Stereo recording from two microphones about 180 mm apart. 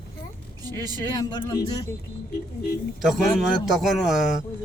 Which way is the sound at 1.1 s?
20° left (ahead or behind).